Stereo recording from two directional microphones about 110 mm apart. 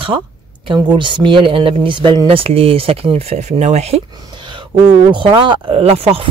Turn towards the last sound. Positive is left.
turn(degrees=-60)  # may be behind; listen again after turning